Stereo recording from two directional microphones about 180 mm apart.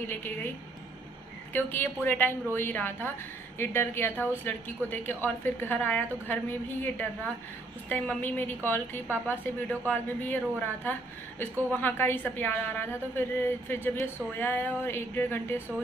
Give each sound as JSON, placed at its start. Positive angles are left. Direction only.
{"t": 0.1, "sound": "a woman's voice", "side_deg": 10}
{"t": 1.5, "sound": "a woman's voice", "side_deg": 10}